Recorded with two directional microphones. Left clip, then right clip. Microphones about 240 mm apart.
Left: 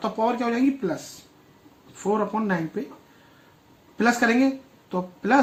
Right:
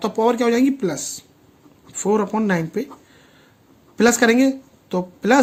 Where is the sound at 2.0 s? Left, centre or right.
Right.